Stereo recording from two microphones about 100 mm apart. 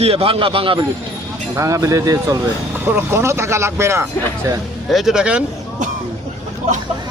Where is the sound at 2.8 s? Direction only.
25° right (ahead or behind).